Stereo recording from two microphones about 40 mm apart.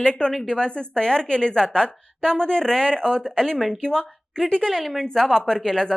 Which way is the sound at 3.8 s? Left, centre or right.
Centre.